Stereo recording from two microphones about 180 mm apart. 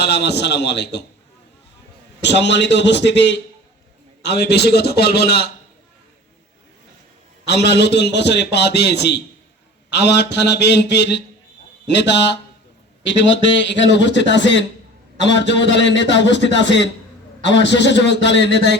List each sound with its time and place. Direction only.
0.0 s a man's voice: 65° left (ahead or behind)
2.2 s a man's voice: 75° left (ahead or behind)
7.4 s a man's voice: 70° left (ahead or behind)
13.1 s a man's voice: 90° left; by 18.8 s 75° left (ahead or behind)